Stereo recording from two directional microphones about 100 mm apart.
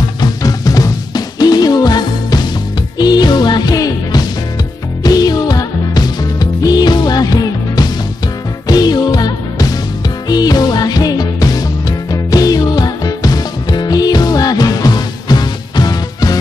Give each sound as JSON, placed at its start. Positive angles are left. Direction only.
{"t": 0.2, "sound": "music", "side_deg": 40}